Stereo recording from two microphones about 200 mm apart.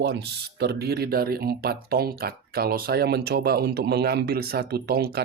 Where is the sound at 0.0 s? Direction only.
55° right (ahead or behind).